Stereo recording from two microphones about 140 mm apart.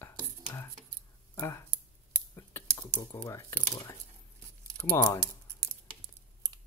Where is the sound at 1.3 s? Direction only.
20° left (ahead or behind).